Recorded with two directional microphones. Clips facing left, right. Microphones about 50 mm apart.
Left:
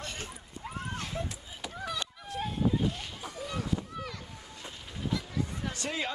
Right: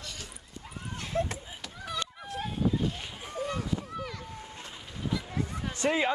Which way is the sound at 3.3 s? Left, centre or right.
Right.